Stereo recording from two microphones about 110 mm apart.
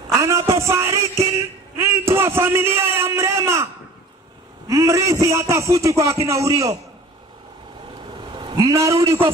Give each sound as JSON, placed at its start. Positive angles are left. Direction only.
{"t": 0.1, "sound": "music", "side_deg": -30}
{"t": 1.8, "sound": "a man's voice", "side_deg": -25}
{"t": 4.6, "sound": "a man's voice", "side_deg": -30}
{"t": 8.1, "sound": "vehicle", "side_deg": -45}
{"t": 8.6, "sound": "a man's voice", "side_deg": -30}